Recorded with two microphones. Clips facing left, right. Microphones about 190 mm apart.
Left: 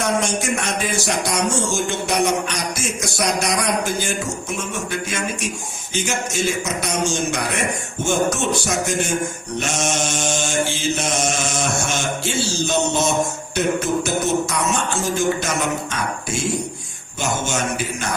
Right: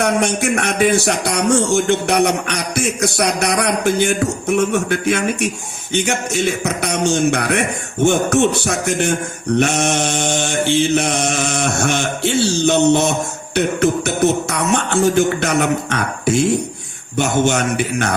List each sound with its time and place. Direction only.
0.0 s music: 65° right (ahead or behind)
17.2 s music: 65° right (ahead or behind)